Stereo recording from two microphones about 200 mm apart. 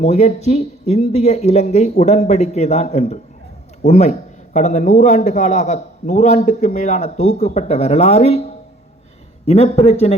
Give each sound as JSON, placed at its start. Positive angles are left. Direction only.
{"t": 0.0, "sound": "a man's voice", "side_deg": 35}